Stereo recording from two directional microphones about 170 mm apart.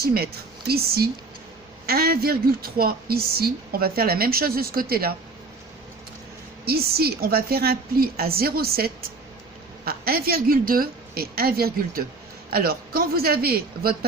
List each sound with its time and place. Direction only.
0.0 s a woman's voice: 65° right (ahead or behind)
6.7 s a woman's voice: 65° right (ahead or behind)